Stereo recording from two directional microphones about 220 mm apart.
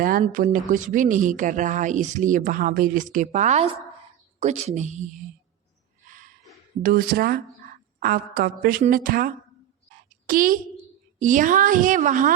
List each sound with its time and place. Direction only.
0.0 s speech: 40° right (ahead or behind)
6.8 s speech: 40° right (ahead or behind)